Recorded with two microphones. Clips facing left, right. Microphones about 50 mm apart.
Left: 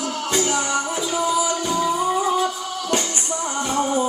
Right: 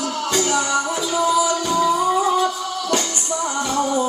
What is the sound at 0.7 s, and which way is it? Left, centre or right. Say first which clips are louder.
Music: right 2 dB; right.